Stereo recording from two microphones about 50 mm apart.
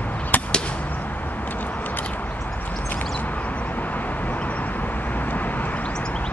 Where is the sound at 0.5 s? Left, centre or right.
Centre.